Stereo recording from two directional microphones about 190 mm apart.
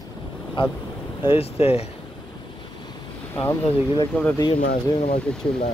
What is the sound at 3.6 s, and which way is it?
Speech, 25° left (ahead or behind).